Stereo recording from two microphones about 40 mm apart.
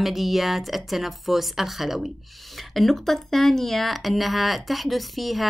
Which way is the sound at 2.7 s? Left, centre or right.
Centre.